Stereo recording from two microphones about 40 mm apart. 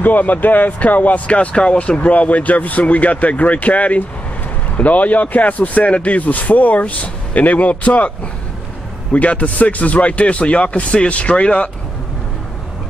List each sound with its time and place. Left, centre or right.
0.0 s speech: left
1.3 s speech: left
9.1 s speech: left